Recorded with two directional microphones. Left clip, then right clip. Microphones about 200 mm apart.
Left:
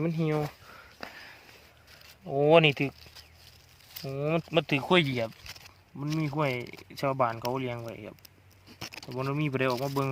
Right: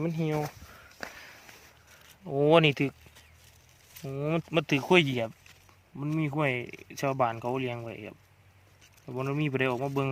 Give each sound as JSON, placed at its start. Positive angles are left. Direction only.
{"t": 0.0, "sound": "speech", "side_deg": 0}
{"t": 1.0, "sound": "a sound", "side_deg": -50}
{"t": 2.2, "sound": "speech", "side_deg": -15}
{"t": 4.0, "sound": "speech", "side_deg": -5}
{"t": 9.1, "sound": "speech", "side_deg": -20}